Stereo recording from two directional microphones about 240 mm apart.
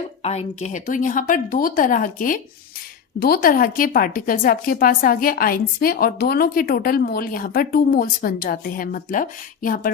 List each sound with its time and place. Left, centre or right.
0.2 s a woman's voice: left